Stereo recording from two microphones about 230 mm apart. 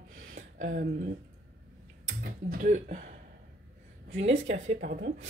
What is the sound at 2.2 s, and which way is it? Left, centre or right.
Speech, right.